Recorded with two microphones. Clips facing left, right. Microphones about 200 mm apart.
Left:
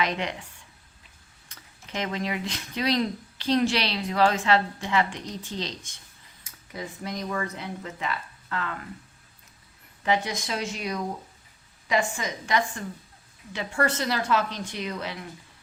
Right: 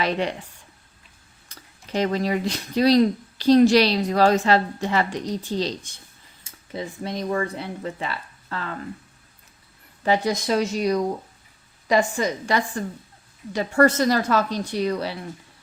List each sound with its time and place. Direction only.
0.0 s speech: 35° right (ahead or behind)
1.5 s speech: 35° right (ahead or behind)
10.0 s speech: 35° right (ahead or behind)